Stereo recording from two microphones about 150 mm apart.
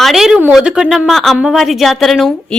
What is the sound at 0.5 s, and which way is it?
A woman's voice, 5° right (ahead or behind).